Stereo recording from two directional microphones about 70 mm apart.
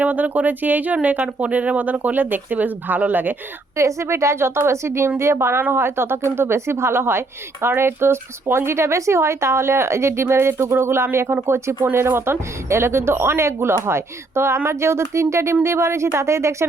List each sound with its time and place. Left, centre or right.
0.0 s speech: right
3.8 s speech: right